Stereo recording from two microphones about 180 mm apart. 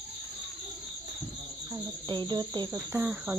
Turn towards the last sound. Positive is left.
turn(degrees=-15)  # may be behind; listen again after turning